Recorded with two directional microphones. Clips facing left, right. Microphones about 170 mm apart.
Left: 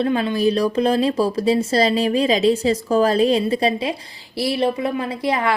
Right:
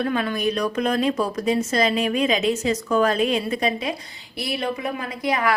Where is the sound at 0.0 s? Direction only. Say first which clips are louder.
Left 5 dB; 25° left (ahead or behind).